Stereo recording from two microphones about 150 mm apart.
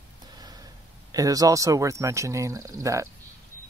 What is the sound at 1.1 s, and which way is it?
Speech, 25° right (ahead or behind).